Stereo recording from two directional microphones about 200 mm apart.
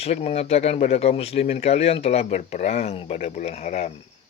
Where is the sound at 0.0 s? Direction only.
30° left (ahead or behind).